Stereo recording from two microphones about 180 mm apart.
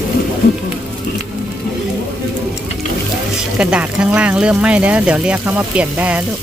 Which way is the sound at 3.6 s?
5° right (ahead or behind).